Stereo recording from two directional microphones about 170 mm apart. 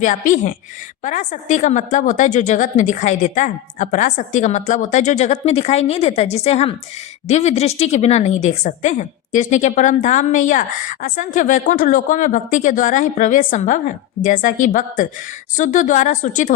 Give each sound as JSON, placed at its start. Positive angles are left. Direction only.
{"t": 0.0, "sound": "a woman's voice", "side_deg": 50}